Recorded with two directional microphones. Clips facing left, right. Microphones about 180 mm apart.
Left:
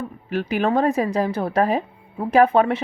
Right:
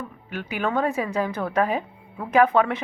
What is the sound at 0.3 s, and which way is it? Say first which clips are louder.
Speech: left 6 dB; 40° left (ahead or behind).